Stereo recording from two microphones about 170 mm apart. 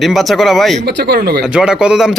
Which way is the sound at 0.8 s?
70° right (ahead or behind).